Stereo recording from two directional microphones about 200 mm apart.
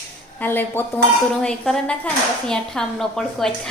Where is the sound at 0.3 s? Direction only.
10° left (ahead or behind).